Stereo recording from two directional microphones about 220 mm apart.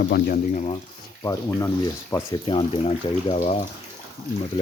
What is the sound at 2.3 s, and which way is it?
Speech, 25° left (ahead or behind).